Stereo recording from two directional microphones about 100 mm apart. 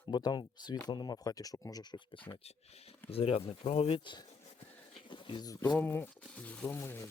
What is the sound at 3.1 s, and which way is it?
Speech, 75° left (ahead or behind).